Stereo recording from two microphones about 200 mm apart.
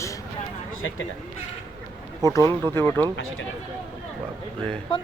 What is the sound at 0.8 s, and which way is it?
Speech, 75° left (ahead or behind).